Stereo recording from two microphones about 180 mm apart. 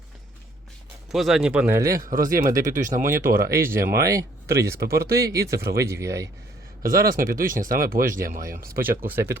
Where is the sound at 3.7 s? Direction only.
60° right (ahead or behind).